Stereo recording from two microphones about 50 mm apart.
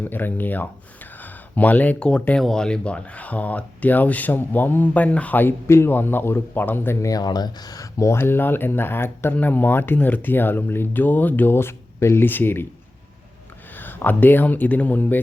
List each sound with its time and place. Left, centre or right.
0.0 s speech: left
1.2 s a sound: left
2.0 s speech: centre
5.6 s speech: left
5.9 s speech: left
6.5 s speech: left
7.9 s speech: left
8.2 s speech: left
9.3 s speech: left
11.5 s speech: left
12.2 s speech: left
13.7 s speech: left